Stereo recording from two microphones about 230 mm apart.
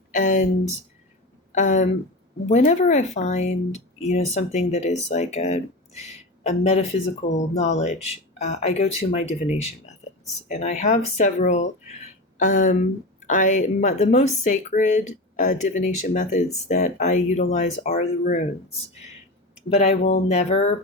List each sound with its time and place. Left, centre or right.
0.1 s a sound: left
1.5 s speech: left
19.7 s speech: left